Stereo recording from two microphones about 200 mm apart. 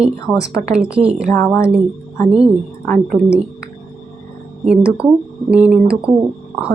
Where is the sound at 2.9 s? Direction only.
Centre (ahead or behind).